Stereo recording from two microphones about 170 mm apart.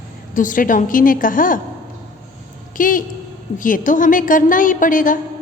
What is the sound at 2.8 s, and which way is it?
A woman's voice, 55° left (ahead or behind).